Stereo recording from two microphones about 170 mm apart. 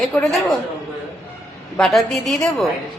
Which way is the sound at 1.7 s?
Centre (ahead or behind).